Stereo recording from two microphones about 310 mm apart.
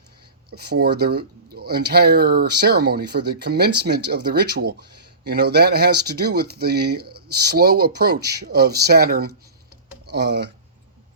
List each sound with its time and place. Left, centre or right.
0.5 s speech: right